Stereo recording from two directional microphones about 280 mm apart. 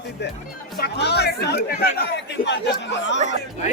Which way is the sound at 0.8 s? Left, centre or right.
Left.